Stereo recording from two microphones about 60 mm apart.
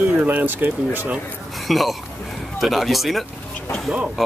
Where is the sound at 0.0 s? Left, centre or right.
Right.